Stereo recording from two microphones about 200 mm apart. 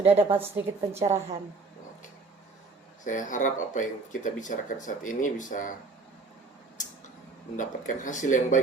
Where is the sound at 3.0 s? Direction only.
40° left (ahead or behind).